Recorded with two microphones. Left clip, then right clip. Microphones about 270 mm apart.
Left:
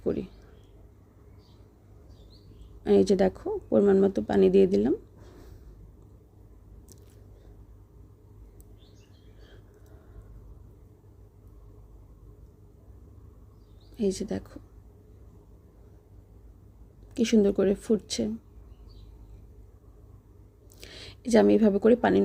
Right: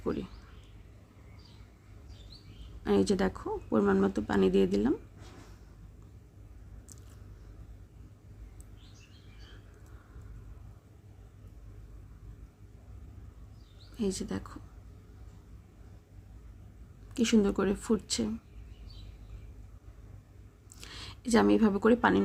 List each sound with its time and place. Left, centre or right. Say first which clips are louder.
0.0 s a sound: left 5 dB; centre
2.8 s speech: left 6 dB; centre
13.9 s speech: left 5 dB; centre
17.2 s speech: left 5 dB; centre
20.8 s speech: left 2 dB; centre